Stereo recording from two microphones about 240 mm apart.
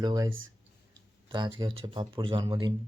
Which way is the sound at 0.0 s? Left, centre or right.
Centre.